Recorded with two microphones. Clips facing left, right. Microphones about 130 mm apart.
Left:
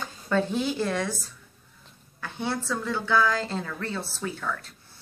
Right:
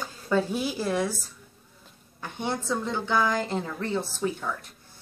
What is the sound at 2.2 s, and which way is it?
A woman's voice, 20° right (ahead or behind).